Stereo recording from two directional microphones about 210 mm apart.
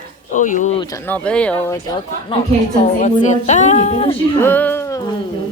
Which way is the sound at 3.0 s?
35° left (ahead or behind).